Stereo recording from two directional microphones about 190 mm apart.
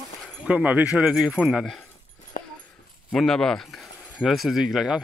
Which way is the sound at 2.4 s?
40° left (ahead or behind).